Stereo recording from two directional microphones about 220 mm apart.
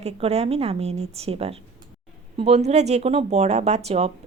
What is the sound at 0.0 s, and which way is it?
Speech, 30° right (ahead or behind).